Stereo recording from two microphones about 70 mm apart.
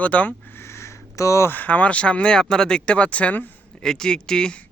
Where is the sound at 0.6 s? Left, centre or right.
Left.